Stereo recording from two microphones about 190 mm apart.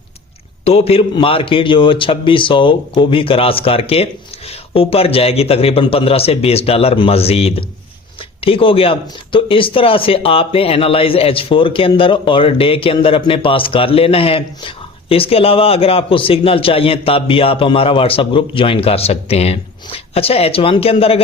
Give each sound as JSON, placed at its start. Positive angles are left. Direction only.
{"t": 0.6, "sound": "a man's voice", "side_deg": 30}